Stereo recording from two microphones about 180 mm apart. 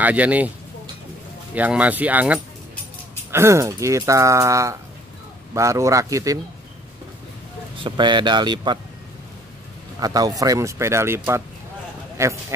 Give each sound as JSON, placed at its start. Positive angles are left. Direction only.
{"t": 0.0, "sound": "speech", "side_deg": -10}
{"t": 1.5, "sound": "speech", "side_deg": -10}
{"t": 7.7, "sound": "speech", "side_deg": -25}
{"t": 9.9, "sound": "speech", "side_deg": -20}